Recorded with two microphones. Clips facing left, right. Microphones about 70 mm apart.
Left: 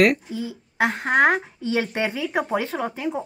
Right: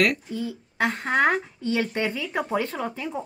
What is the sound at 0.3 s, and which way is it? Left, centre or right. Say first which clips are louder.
Speech: even; right.